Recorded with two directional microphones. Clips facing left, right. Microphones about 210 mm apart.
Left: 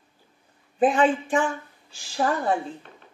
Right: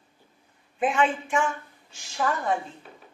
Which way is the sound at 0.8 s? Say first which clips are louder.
Left 5 dB; 35° left (ahead or behind).